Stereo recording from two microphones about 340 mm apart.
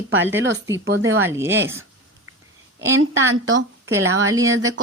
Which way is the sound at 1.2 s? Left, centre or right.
Centre.